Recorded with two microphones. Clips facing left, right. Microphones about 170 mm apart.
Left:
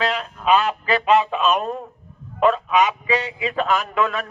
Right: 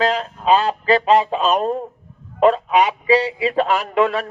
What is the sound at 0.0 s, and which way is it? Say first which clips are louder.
A man's voice: right 4 dB; 35° right (ahead or behind).